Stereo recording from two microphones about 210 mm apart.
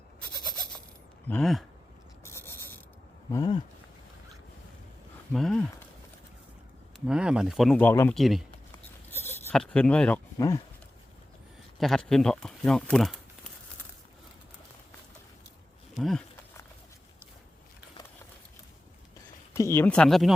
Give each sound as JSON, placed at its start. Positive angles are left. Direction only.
{"t": 0.4, "sound": "a sound", "side_deg": 0}
{"t": 1.3, "sound": "speech", "side_deg": 0}
{"t": 2.2, "sound": "pulleys", "side_deg": 10}
{"t": 3.3, "sound": "a sound", "side_deg": 20}
{"t": 5.3, "sound": "speech", "side_deg": 0}
{"t": 7.1, "sound": "speech", "side_deg": -5}
{"t": 8.2, "sound": "speech", "side_deg": 0}
{"t": 9.1, "sound": "speech", "side_deg": 10}
{"t": 11.8, "sound": "speech", "side_deg": 0}
{"t": 16.0, "sound": "speech", "side_deg": 0}
{"t": 19.5, "sound": "speech", "side_deg": 15}